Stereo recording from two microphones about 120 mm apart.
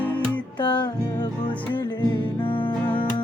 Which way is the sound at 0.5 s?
40° left (ahead or behind).